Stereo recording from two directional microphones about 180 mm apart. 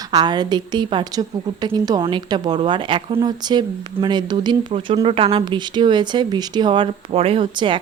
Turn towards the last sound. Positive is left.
turn(degrees=-25)  # may be behind; listen again after turning